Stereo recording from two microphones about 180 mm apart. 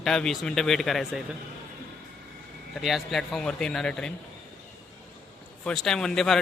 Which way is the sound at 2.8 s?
Centre (ahead or behind).